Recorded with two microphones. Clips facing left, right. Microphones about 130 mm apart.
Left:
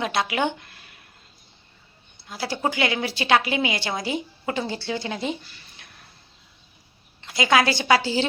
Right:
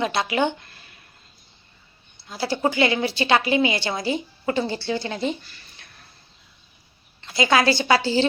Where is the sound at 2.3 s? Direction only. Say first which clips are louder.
Right 3 dB; 5° left (ahead or behind).